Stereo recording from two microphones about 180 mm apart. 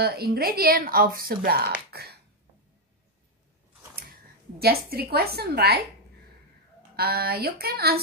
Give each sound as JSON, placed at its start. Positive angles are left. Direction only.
{"t": 0.0, "sound": "speech", "side_deg": -60}
{"t": 4.6, "sound": "speech", "side_deg": -60}
{"t": 7.0, "sound": "speech", "side_deg": -60}